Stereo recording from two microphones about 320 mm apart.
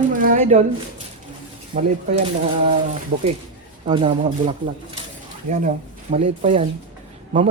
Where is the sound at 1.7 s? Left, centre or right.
Right.